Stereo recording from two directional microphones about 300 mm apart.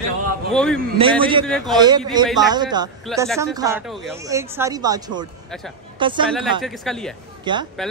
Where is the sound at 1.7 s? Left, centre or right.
Centre.